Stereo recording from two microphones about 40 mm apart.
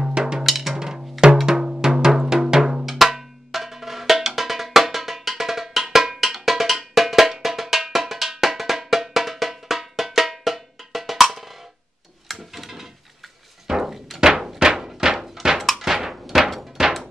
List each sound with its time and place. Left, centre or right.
0.0 s music: centre
0.4 s music: centre
1.2 s percussion: centre
4.4 s music: centre
12.3 s a sound: centre
15.6 s a sound: centre